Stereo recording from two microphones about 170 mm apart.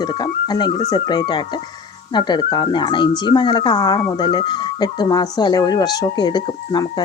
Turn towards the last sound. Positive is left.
turn(degrees=25)  # may be behind; listen again after turning